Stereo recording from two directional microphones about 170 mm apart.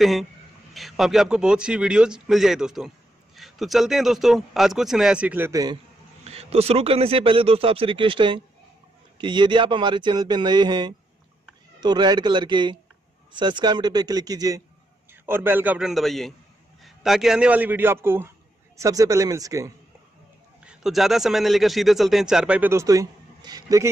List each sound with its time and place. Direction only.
0.0 s a man's voice: centre (ahead or behind); by 5.8 s 20° right (ahead or behind)
6.2 s a man's voice: 35° right (ahead or behind); by 19.7 s 20° right (ahead or behind)
20.6 s a man's voice: centre (ahead or behind); by 23.9 s 20° right (ahead or behind)